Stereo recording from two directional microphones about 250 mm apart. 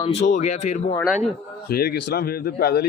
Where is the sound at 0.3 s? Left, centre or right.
Left.